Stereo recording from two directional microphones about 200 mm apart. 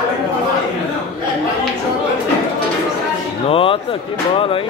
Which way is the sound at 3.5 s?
25° left (ahead or behind).